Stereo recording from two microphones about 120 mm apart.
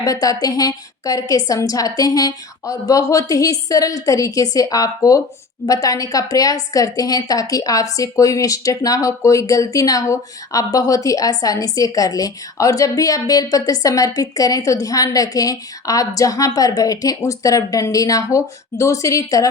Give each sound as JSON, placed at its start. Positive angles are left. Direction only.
{"t": 0.0, "sound": "speech", "side_deg": 30}